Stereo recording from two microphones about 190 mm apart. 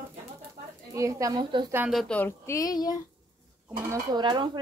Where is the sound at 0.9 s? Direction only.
15° right (ahead or behind).